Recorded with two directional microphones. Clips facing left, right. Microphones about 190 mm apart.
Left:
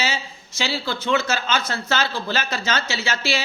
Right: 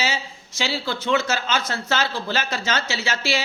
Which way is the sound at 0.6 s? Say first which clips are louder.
Even; 15° right (ahead or behind).